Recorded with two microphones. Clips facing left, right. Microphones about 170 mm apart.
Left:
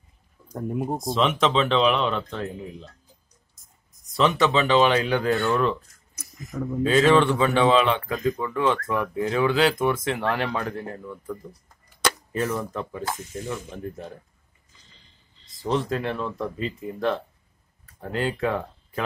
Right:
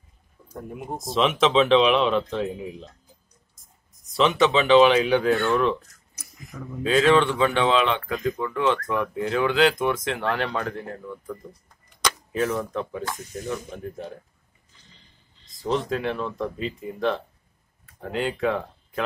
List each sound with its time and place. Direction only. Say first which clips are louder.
0.9 s speech: right 3 dB; centre (ahead or behind)
4.2 s speech: right 1 dB; centre (ahead or behind)
6.1 s a sound: left 8 dB; 45° left (ahead or behind)
6.8 s speech: left 1 dB; centre (ahead or behind)
15.5 s speech: even; centre (ahead or behind)